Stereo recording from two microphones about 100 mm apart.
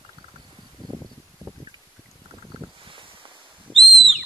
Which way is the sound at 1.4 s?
30° right (ahead or behind).